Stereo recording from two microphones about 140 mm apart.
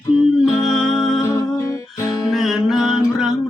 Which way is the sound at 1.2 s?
20° left (ahead or behind).